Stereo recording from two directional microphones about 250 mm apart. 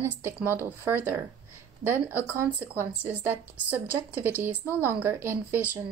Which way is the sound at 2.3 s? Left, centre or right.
Centre.